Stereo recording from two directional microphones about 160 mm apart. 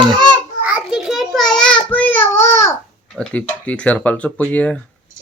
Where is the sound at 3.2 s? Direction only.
10° left (ahead or behind).